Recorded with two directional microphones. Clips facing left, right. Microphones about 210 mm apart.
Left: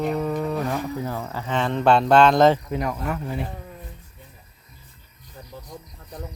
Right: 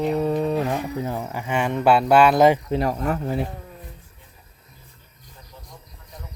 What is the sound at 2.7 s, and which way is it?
Speech, 30° right (ahead or behind).